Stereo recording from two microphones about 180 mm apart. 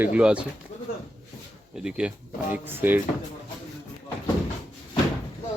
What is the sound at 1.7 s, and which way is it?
Speech, 5° right (ahead or behind).